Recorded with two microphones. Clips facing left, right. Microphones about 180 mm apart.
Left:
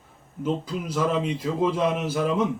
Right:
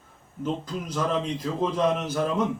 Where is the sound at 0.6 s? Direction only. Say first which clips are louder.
Left 3 dB; 10° left (ahead or behind).